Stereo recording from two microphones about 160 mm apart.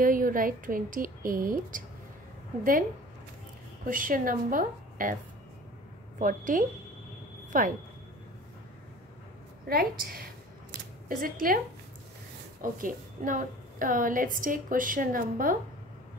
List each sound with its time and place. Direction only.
0.0 s a woman's voice: 60° right (ahead or behind)
3.8 s a woman's voice: 60° right (ahead or behind)
6.1 s a woman's voice: 55° right (ahead or behind)
9.7 s a woman's voice: 65° right (ahead or behind)
12.7 s a woman's voice: 60° right (ahead or behind)